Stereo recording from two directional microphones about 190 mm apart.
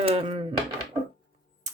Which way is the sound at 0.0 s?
30° right (ahead or behind).